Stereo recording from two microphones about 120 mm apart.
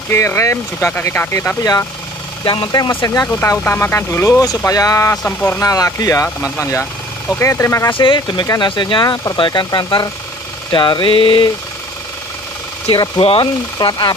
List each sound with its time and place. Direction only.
0.1 s speech: 25° left (ahead or behind)
2.4 s engine: 40° left (ahead or behind)
3.3 s speech: 15° left (ahead or behind)
5.1 s speech: 15° left (ahead or behind)
5.6 s speech: 30° left (ahead or behind)
7.9 s engine: 45° left (ahead or behind)
12.9 s engine: 35° left (ahead or behind)
13.2 s speech: 55° left (ahead or behind)
13.7 s engine: 35° left (ahead or behind)